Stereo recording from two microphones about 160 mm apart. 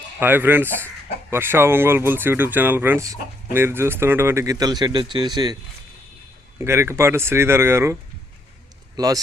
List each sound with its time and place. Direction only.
0.2 s speech: 15° right (ahead or behind)
6.6 s speech: 15° right (ahead or behind)
9.0 s speech: 20° right (ahead or behind)